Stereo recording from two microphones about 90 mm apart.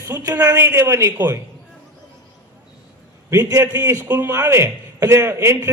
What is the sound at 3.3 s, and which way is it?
A man's voice, 30° right (ahead or behind).